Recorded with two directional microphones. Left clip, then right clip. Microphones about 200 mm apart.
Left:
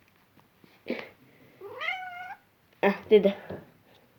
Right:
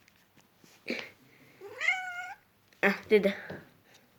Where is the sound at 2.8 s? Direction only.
15° right (ahead or behind).